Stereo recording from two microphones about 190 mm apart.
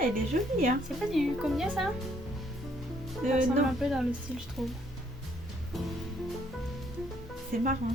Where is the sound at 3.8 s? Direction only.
Centre (ahead or behind).